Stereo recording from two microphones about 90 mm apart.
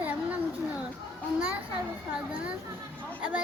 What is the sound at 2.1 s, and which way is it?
Speech, 10° right (ahead or behind).